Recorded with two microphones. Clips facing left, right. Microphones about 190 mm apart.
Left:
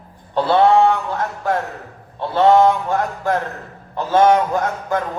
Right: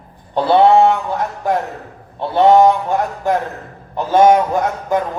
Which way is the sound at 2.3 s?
15° right (ahead or behind).